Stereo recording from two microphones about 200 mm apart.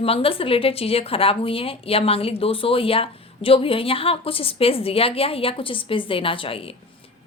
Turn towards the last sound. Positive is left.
turn(degrees=25)  # may be behind; listen again after turning